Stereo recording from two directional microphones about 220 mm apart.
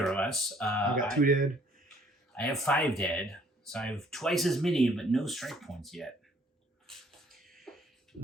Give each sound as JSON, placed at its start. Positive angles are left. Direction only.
{"t": 0.0, "sound": "speech", "side_deg": 5}
{"t": 0.9, "sound": "speech", "side_deg": -40}
{"t": 2.3, "sound": "speech", "side_deg": 5}
{"t": 6.8, "sound": "beatboxing", "side_deg": 0}